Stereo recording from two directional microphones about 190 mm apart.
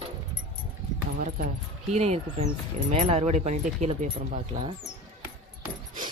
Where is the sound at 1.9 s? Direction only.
35° right (ahead or behind).